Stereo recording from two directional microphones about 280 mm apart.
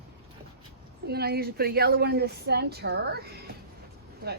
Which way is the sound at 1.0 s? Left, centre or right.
Right.